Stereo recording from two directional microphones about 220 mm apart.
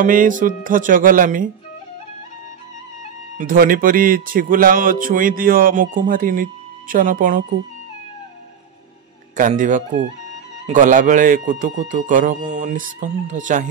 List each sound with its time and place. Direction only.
0.0 s speech: 35° right (ahead or behind)
3.3 s speech: 40° right (ahead or behind)
9.4 s speech: 35° right (ahead or behind)